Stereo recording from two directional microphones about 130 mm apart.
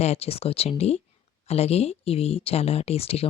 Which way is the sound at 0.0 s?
55° left (ahead or behind).